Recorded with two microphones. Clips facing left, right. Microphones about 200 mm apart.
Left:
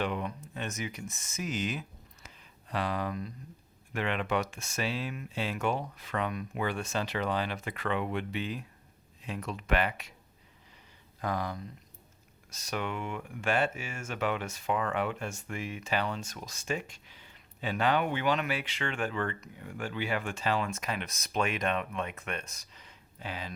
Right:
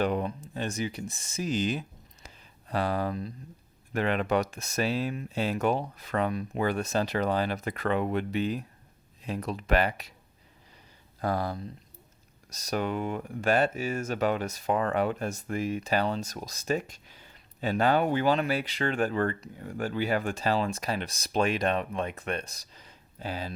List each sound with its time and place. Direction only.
0.0 s speech: 35° right (ahead or behind)
2.2 s a sound: 40° right (ahead or behind)
3.9 s speech: 40° right (ahead or behind)
11.2 s speech: 35° right (ahead or behind)